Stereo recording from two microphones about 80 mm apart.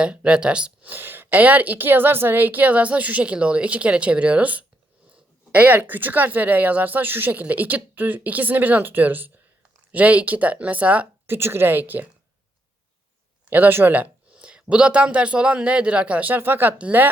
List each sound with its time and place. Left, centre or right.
0.0 s a woman's voice: centre
11.3 s a woman's voice: right
13.5 s speech: right